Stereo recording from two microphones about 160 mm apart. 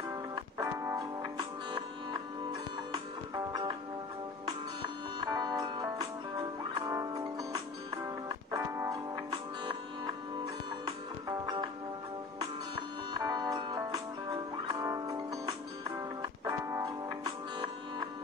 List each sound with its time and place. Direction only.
0.6 s music: 20° right (ahead or behind)
2.9 s music: 25° right (ahead or behind)
5.2 s music: 25° right (ahead or behind)
10.9 s music: 25° right (ahead or behind)
13.1 s music: 25° right (ahead or behind)